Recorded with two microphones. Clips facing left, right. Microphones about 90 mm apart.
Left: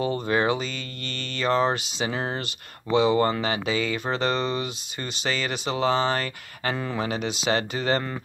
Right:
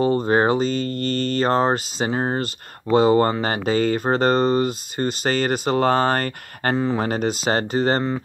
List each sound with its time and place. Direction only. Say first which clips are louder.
0.0 s speech: right 6 dB; 40° right (ahead or behind)